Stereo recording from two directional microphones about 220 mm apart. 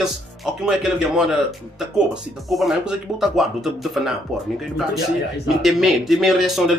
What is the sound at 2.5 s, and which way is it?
Speech, centre (ahead or behind).